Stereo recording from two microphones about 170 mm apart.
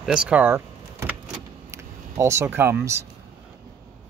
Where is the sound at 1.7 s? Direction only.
15° right (ahead or behind).